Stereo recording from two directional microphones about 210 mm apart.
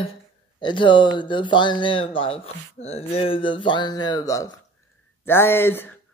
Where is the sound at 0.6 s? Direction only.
20° left (ahead or behind).